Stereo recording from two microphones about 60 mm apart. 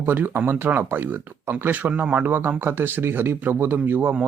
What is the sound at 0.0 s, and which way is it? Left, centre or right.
Speech, right.